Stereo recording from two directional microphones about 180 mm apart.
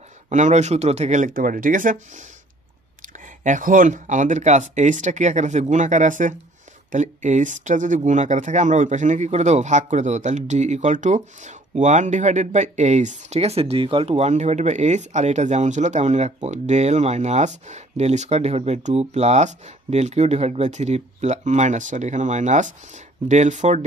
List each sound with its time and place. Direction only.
0.3 s speech: 40° right (ahead or behind)
3.4 s speech: 45° right (ahead or behind)